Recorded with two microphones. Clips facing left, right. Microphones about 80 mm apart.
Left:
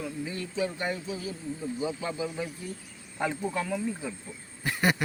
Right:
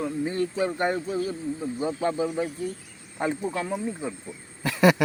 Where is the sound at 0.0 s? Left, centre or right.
Right.